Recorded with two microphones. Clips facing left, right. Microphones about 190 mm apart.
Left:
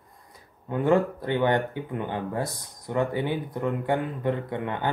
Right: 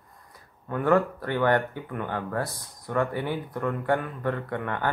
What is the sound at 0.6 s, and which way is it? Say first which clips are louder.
Speech: left 1 dB; 20° left (ahead or behind).